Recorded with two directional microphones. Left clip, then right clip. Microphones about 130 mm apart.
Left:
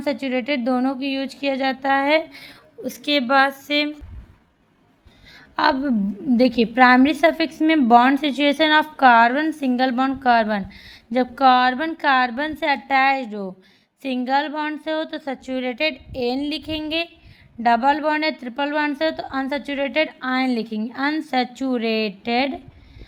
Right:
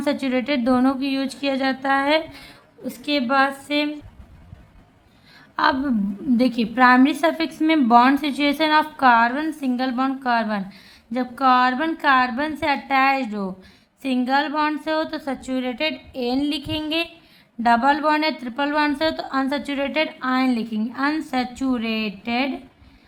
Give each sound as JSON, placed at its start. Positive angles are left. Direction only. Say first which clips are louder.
{"t": 0.0, "sound": "a woman's voice", "louder": "right 1 dB", "side_deg": 25}
{"t": 2.4, "sound": "a woman's voice", "louder": "left 3 dB", "side_deg": 55}
{"t": 5.5, "sound": "a woman's voice", "louder": "left 1 dB", "side_deg": 30}